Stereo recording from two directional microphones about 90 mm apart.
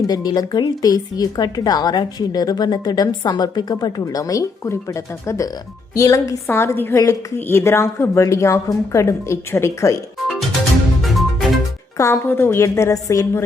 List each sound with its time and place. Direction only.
0.1 s speech: 45° left (ahead or behind)
11.0 s music: centre (ahead or behind)
11.9 s speech: 30° left (ahead or behind)